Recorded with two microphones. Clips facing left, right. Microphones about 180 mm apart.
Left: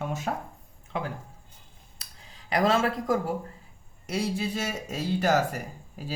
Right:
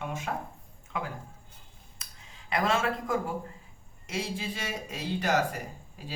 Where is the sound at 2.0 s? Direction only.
35° left (ahead or behind).